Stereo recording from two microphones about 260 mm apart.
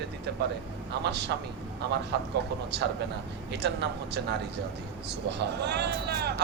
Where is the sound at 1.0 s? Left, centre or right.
Right.